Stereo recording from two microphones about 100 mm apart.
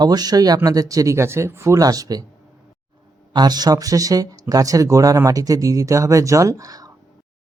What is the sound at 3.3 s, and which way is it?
Speech, 45° right (ahead or behind).